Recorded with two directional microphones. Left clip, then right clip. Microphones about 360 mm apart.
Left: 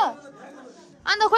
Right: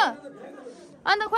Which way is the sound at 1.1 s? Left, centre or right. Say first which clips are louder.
Right 1 dB; centre.